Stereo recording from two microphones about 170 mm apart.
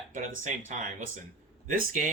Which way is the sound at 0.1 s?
50° right (ahead or behind).